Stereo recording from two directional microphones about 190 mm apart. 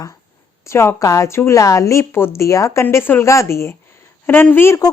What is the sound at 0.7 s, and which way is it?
A woman's voice, 15° left (ahead or behind).